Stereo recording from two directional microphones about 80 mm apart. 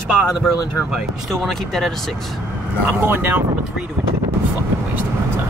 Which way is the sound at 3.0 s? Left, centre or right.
Right.